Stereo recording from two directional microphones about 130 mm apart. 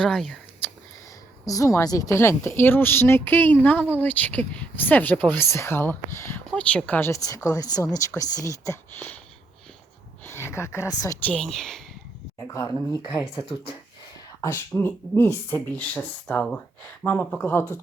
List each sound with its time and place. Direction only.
0.0 s speech: 5° left (ahead or behind)
1.5 s speech: 25° left (ahead or behind)
7.1 s speech: 25° left (ahead or behind)
10.2 s speech: 20° left (ahead or behind)
11.3 s speech: 5° left (ahead or behind)
13.5 s speech: 35° left (ahead or behind)
14.4 s speech: 15° left (ahead or behind)